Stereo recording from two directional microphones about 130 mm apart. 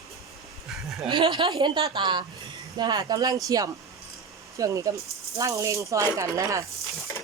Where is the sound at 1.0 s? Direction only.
40° right (ahead or behind).